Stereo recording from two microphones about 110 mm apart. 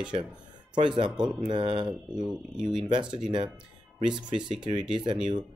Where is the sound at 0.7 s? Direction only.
45° right (ahead or behind).